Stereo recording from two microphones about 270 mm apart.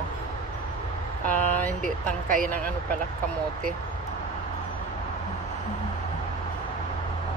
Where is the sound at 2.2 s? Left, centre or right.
Right.